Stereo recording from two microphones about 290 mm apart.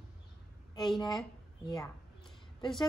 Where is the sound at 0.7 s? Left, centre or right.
Centre.